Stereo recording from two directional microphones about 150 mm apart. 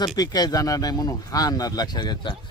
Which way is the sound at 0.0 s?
25° left (ahead or behind).